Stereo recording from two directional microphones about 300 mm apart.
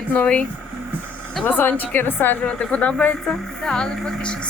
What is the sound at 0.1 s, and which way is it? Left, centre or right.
A woman's voice, centre.